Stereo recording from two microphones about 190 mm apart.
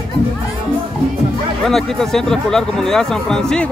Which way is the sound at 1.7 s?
Centre (ahead or behind).